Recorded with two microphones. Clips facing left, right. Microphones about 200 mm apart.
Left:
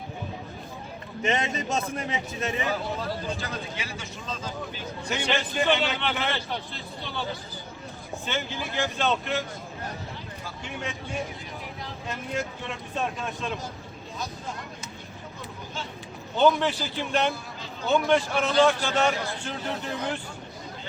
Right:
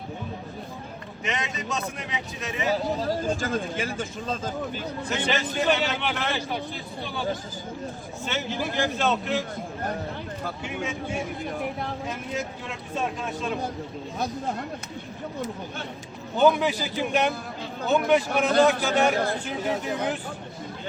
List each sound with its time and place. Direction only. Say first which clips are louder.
1.2 s speech: left 4 dB; 40° left (ahead or behind)
2.6 s speech: right 4 dB; 35° right (ahead or behind)
5.0 s speech: even; centre (ahead or behind)
11.4 s speech: right 9 dB; 55° right (ahead or behind)
12.0 s speech: right 1 dB; 5° right (ahead or behind)
15.4 s speech: right 5 dB; 60° right (ahead or behind)
16.4 s a man's voice: right 1 dB; 10° right (ahead or behind)
19.1 s speech: right 7 dB; 55° right (ahead or behind)
19.5 s a man's voice: right 4 dB; 10° right (ahead or behind)